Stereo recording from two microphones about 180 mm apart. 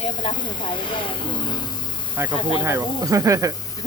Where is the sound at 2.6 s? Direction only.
15° right (ahead or behind).